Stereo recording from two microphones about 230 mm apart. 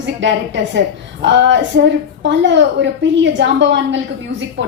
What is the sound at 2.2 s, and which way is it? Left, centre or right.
A woman's voice, right.